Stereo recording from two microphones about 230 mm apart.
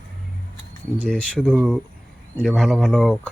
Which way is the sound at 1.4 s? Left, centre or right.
Centre.